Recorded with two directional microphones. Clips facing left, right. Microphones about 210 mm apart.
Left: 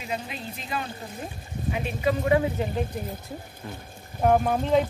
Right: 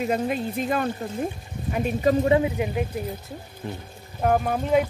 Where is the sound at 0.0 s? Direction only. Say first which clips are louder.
Right 9 dB; 50° right (ahead or behind).